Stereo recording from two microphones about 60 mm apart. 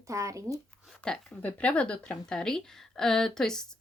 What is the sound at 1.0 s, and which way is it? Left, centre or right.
A woman's voice, centre.